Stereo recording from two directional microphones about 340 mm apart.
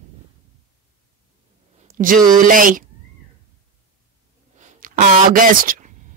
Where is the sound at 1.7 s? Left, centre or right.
Right.